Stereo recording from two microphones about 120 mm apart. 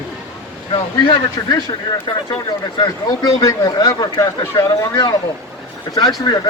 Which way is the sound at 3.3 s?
30° left (ahead or behind).